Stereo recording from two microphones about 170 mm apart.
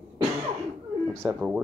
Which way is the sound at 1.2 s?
5° right (ahead or behind).